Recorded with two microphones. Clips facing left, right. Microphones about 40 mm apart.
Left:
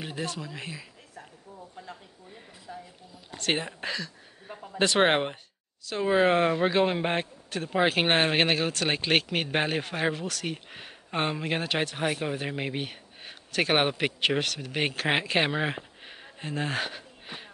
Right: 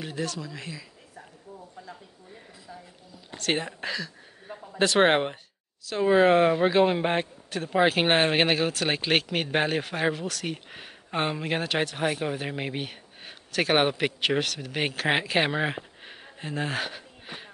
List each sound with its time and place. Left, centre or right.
0.0 s speech: centre
2.7 s speech: left
3.3 s speech: centre